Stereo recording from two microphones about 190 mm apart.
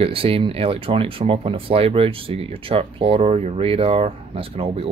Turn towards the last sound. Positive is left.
turn(degrees=-30)  # may be behind; listen again after turning